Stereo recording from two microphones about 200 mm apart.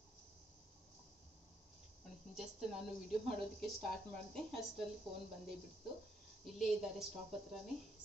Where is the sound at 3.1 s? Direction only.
Centre (ahead or behind).